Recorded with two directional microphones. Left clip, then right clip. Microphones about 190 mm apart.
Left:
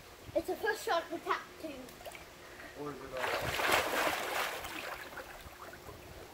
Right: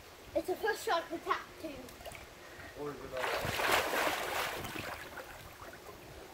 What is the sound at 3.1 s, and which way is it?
Boat, 5° right (ahead or behind).